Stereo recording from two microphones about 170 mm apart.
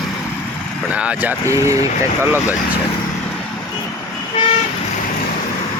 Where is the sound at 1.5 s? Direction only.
15° right (ahead or behind).